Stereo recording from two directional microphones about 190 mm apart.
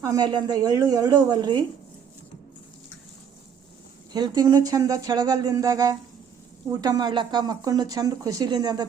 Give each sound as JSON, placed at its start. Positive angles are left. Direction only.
{"t": 0.0, "sound": "speech", "side_deg": -20}
{"t": 4.1, "sound": "speech", "side_deg": -20}